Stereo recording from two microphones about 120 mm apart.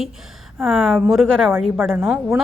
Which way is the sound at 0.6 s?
Centre (ahead or behind).